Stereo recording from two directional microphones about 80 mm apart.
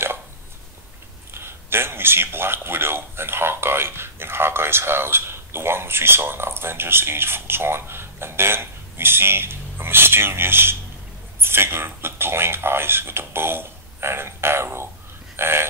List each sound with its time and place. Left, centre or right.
1.3 s a man's voice: right
15.3 s dog: right